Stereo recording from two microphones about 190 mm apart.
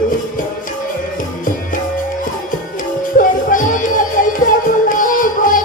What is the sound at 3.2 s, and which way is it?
Music, 45° left (ahead or behind).